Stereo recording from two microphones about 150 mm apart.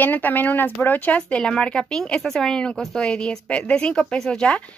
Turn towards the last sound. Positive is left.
turn(degrees=5)  # may be behind; listen again after turning